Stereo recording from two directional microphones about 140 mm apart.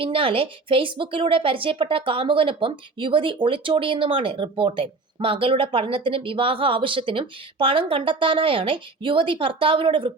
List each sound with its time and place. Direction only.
0.0 s speech: 40° right (ahead or behind)